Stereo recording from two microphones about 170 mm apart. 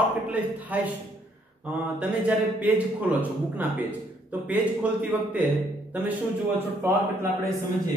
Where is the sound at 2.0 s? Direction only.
10° right (ahead or behind).